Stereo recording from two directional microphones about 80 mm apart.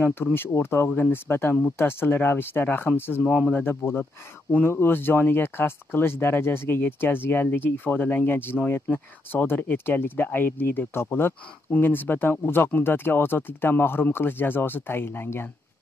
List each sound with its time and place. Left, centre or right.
0.0 s speech: left